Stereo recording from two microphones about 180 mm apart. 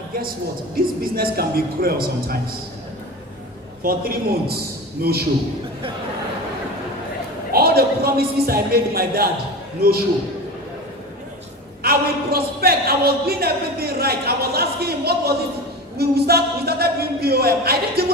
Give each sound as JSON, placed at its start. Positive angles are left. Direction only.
{"t": 1.1, "sound": "a man's voice", "side_deg": -55}
{"t": 3.8, "sound": "a man's voice", "side_deg": -55}
{"t": 7.5, "sound": "speech", "side_deg": -60}
{"t": 11.8, "sound": "a sound", "side_deg": -60}
{"t": 16.0, "sound": "a man's voice", "side_deg": -60}